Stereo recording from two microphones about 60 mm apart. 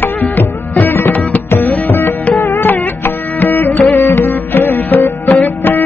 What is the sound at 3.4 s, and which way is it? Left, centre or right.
Music, left.